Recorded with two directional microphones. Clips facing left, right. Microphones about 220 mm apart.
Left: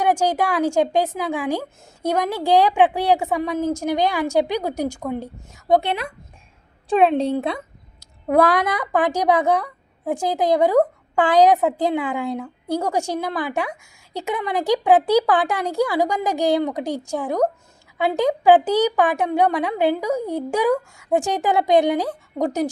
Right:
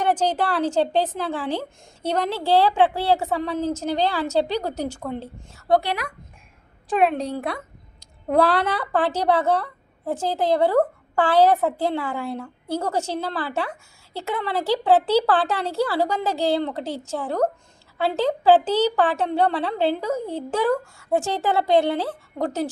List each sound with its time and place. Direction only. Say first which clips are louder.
0.0 s a woman's voice: left 2 dB; 10° left (ahead or behind)
8.3 s a woman's voice: left 2 dB; 10° left (ahead or behind)